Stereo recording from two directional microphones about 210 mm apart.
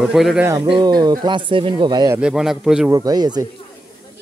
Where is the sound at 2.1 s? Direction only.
5° right (ahead or behind).